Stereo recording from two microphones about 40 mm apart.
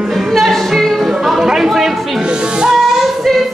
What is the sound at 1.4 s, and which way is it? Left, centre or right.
Music, centre.